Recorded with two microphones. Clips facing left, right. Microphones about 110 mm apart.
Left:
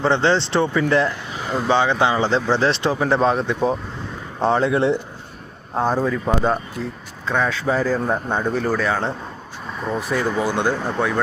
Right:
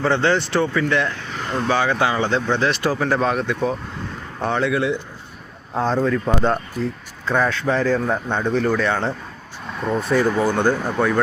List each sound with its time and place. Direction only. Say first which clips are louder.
0.0 s speech: left 1 dB; 25° left (ahead or behind)
1.0 s speech: left 2 dB; 5° left (ahead or behind)
1.7 s speech: left 2 dB; 25° left (ahead or behind)
5.7 s speech: right 1 dB; 10° left (ahead or behind)